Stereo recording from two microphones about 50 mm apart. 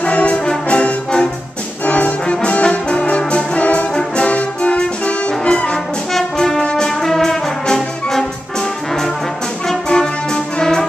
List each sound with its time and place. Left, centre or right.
0.0 s brass instrument: left
6.3 s brass instrument: centre
9.8 s music: centre